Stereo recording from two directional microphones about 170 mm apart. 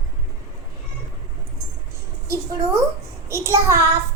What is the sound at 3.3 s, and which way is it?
Speech, 15° right (ahead or behind).